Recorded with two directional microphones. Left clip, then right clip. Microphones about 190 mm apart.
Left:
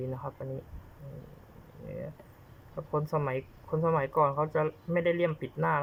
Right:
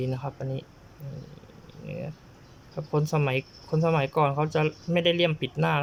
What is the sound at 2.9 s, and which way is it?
Speech, 15° right (ahead or behind).